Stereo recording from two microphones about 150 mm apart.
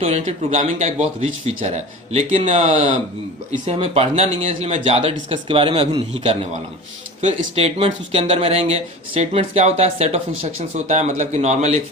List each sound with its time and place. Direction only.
0.0 s speech: 45° right (ahead or behind)